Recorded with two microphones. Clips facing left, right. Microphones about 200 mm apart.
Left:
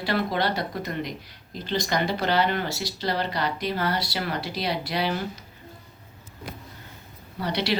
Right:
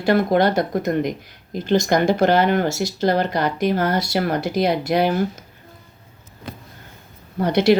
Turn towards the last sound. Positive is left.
turn(degrees=-50)  # may be behind; listen again after turning